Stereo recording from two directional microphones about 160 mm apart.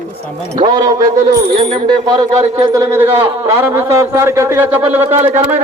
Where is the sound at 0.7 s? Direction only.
25° right (ahead or behind).